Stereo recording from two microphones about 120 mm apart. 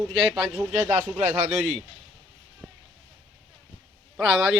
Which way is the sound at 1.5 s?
Centre (ahead or behind).